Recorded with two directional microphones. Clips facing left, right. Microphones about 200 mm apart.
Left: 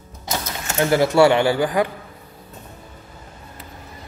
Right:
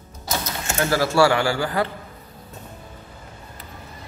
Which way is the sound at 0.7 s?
20° left (ahead or behind).